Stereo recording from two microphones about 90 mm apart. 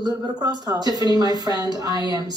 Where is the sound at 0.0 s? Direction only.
50° right (ahead or behind).